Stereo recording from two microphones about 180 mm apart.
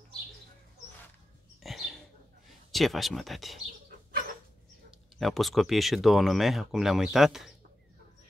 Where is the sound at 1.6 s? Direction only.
Centre (ahead or behind).